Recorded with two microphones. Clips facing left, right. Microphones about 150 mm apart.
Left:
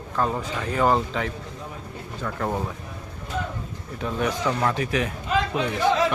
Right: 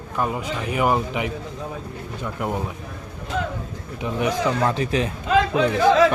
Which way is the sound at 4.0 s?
15° right (ahead or behind).